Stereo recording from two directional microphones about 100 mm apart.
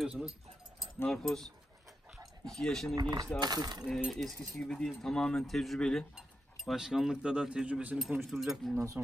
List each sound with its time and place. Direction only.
0.0 s speech: 5° right (ahead or behind)
3.0 s speech: 45° right (ahead or behind)
4.1 s speech: 5° left (ahead or behind); by 8.0 s 10° right (ahead or behind)
8.2 s speech: centre (ahead or behind)